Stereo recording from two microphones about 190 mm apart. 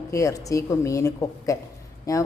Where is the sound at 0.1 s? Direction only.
15° left (ahead or behind).